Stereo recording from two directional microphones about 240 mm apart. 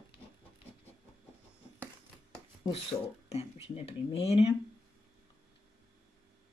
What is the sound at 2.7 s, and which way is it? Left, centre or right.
Speech, left.